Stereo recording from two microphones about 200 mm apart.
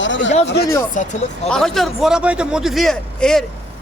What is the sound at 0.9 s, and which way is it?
Speech, 40° left (ahead or behind).